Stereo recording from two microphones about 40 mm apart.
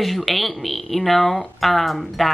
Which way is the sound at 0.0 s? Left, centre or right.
Centre.